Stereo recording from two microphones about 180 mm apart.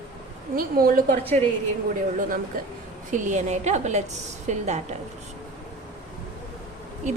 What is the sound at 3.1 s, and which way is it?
A woman's voice, 40° right (ahead or behind).